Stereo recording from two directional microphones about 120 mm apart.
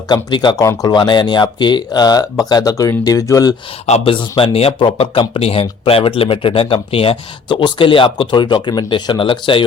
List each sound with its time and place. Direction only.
0.1 s speech: 40° left (ahead or behind)
0.6 s speech: 30° left (ahead or behind)
3.8 s speech: 65° left (ahead or behind)
4.1 s speech: 45° left (ahead or behind)